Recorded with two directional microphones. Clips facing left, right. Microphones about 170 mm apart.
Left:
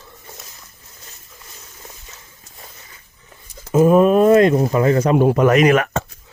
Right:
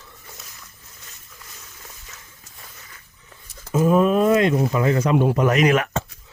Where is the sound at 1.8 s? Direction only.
25° left (ahead or behind).